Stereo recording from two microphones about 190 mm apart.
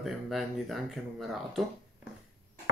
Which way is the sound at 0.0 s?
Centre (ahead or behind).